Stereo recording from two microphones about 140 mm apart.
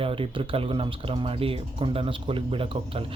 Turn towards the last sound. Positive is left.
turn(degrees=-40)  # may be behind; listen again after turning